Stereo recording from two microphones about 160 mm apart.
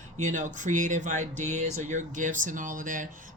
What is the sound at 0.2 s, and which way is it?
Speech, 50° right (ahead or behind).